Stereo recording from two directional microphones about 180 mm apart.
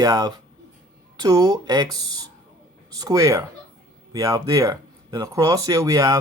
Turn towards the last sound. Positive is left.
turn(degrees=-20)  # may be behind; listen again after turning